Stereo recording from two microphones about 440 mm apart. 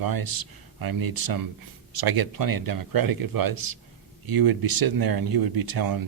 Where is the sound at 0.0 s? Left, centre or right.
Right.